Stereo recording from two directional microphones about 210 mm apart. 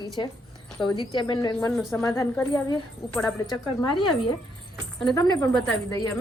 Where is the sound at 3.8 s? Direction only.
25° left (ahead or behind).